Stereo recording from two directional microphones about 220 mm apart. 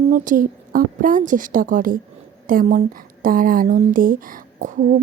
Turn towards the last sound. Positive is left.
turn(degrees=-40)  # may be behind; listen again after turning